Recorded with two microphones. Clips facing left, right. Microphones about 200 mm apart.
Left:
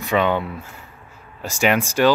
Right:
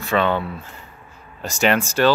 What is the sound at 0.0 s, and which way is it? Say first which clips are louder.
Speech: even; 15° left (ahead or behind).